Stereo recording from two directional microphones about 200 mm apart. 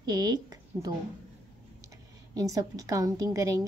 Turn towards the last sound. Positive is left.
turn(degrees=-15)  # may be behind; listen again after turning